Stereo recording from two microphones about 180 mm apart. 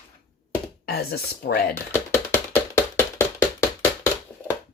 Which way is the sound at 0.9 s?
60° left (ahead or behind).